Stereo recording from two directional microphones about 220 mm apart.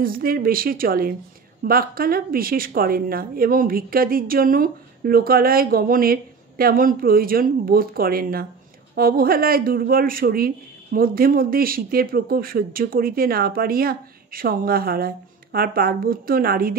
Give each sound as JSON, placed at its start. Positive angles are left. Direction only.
{"t": 0.0, "sound": "a woman's voice", "side_deg": -40}